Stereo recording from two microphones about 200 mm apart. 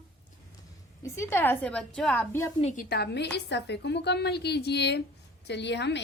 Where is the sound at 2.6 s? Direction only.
35° left (ahead or behind).